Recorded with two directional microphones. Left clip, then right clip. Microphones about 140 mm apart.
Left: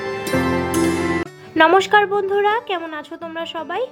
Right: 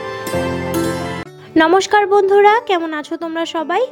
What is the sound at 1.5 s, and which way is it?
A woman's voice, 35° right (ahead or behind).